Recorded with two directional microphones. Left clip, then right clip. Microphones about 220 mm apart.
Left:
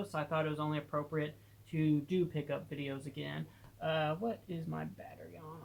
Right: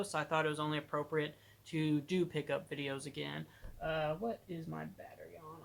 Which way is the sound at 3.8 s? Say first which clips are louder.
Left 2 dB; 5° right (ahead or behind).